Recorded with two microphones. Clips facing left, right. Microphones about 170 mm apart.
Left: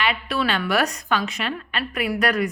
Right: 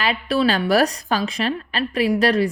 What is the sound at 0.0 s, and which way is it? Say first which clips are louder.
A woman's voice: right 4 dB; 35° right (ahead or behind).